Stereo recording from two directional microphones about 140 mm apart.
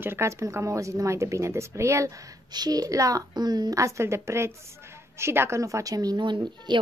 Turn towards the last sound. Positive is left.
turn(degrees=-35)  # may be behind; listen again after turning